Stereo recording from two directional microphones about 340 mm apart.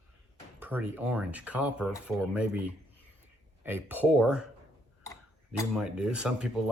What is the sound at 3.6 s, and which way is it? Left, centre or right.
Speech, centre.